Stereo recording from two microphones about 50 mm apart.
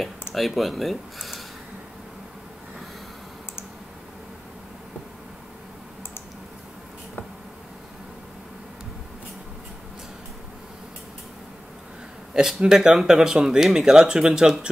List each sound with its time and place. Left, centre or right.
0.3 s speech: centre
12.4 s speech: centre